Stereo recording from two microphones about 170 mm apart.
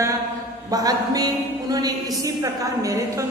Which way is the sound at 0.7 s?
20° right (ahead or behind).